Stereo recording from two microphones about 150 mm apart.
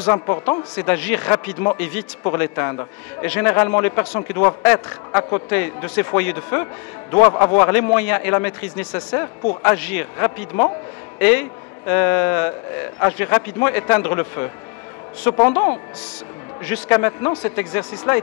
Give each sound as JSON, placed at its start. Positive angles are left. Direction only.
{"t": 0.0, "sound": "a man's voice", "side_deg": 15}